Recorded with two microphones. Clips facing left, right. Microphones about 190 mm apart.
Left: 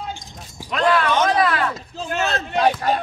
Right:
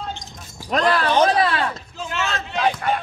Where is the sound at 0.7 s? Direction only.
40° right (ahead or behind).